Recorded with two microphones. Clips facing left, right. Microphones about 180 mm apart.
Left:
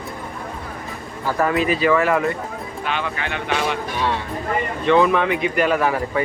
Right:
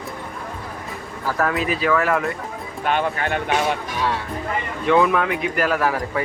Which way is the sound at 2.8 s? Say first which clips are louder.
Right 5 dB; 50° right (ahead or behind).